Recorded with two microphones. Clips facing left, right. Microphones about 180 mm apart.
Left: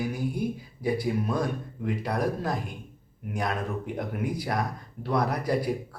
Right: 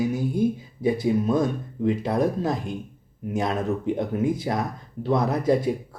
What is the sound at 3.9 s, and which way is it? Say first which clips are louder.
Speech: right 6 dB; 25° right (ahead or behind).